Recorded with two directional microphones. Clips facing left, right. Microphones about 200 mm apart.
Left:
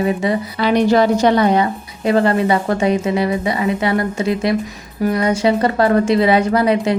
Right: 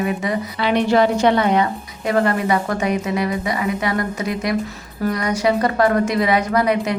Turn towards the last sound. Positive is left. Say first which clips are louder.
# left 3 dB
turn(degrees=30)  # may be behind; listen again after turning